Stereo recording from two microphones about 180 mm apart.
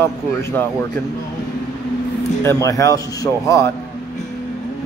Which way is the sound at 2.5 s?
15° left (ahead or behind).